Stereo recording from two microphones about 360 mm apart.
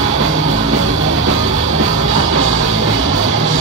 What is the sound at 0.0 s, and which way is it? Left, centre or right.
Music, right.